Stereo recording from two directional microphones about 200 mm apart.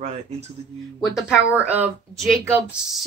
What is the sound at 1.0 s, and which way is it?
Speech, centre (ahead or behind).